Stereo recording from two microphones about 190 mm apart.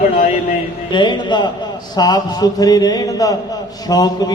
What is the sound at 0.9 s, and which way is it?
A man's voice, 25° left (ahead or behind).